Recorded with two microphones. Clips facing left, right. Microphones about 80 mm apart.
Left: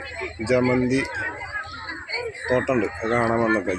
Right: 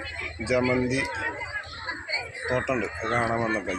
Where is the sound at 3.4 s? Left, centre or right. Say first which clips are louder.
Left 6 dB; left.